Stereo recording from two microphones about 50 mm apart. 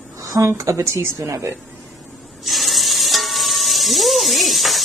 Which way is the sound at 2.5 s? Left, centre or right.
Centre.